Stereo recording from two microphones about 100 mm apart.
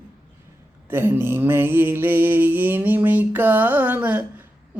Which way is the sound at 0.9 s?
20° right (ahead or behind).